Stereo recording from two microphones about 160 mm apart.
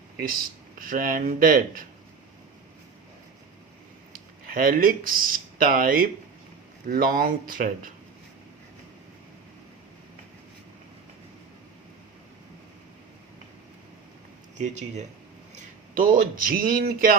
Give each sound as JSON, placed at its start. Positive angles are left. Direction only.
{"t": 0.8, "sound": "speech", "side_deg": -60}
{"t": 4.1, "sound": "speech", "side_deg": -65}
{"t": 14.6, "sound": "speech", "side_deg": -45}
{"t": 16.0, "sound": "speech", "side_deg": -60}